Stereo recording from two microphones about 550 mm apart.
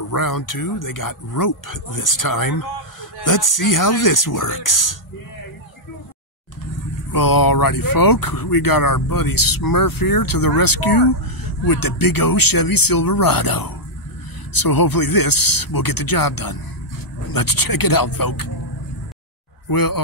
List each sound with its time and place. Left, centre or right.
0.1 s speech: left
7.1 s speech: left
19.7 s speech: left